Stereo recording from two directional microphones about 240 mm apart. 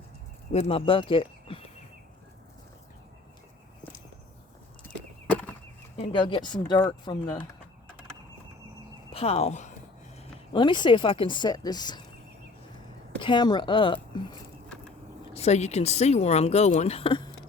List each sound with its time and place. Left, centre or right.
0.5 s speech: left
6.0 s speech: left
9.1 s speech: left
13.2 s speech: centre